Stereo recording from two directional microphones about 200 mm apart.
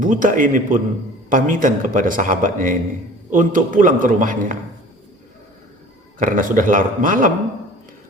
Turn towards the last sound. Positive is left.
turn(degrees=-40)  # may be behind; listen again after turning